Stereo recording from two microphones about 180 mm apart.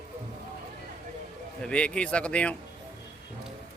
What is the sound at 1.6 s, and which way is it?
Speech, 5° left (ahead or behind).